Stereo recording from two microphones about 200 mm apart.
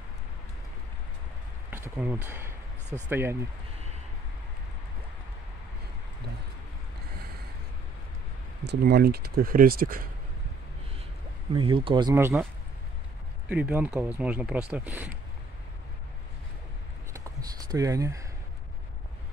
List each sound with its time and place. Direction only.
1.7 s speech: 10° right (ahead or behind)
8.6 s speech: 55° right (ahead or behind)
11.5 s speech: 25° right (ahead or behind)
13.5 s speech: 5° right (ahead or behind)
17.1 s a sound: 20° right (ahead or behind)